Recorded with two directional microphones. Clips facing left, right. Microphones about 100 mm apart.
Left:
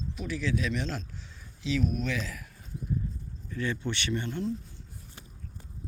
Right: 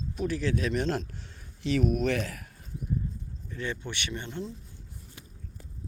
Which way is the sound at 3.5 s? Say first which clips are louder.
Left 3 dB; 20° right (ahead or behind).